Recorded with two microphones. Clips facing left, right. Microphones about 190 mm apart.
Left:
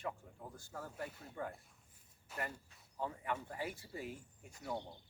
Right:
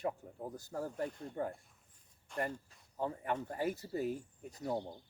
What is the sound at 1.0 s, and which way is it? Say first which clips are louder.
Speech: right 8 dB; 5° left (ahead or behind).